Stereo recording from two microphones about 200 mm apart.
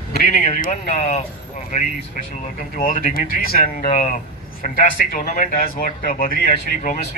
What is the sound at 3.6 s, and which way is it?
A man's voice, 35° left (ahead or behind).